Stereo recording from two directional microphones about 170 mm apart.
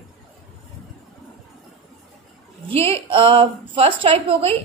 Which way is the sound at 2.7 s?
35° right (ahead or behind).